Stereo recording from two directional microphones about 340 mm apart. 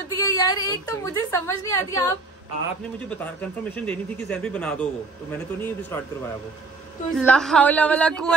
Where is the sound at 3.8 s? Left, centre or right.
Centre.